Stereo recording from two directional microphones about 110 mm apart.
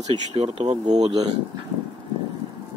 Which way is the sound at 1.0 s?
40° right (ahead or behind).